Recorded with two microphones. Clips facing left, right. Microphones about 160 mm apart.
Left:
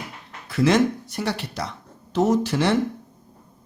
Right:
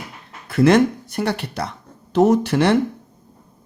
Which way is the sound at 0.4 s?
55° right (ahead or behind).